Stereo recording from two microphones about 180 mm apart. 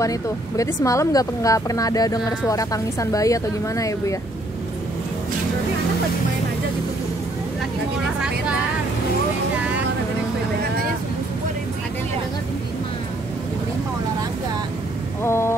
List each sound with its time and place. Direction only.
0.0 s speech: 20° left (ahead or behind)
15.2 s speech: 15° left (ahead or behind)